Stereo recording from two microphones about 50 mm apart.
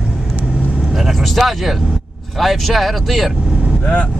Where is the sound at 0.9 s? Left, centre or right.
Centre.